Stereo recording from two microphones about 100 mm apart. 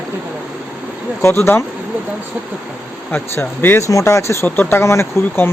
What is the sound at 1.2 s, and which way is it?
Speech, 25° left (ahead or behind).